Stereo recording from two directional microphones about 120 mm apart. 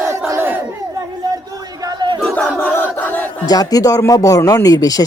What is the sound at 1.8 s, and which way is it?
Battle cry, 40° right (ahead or behind).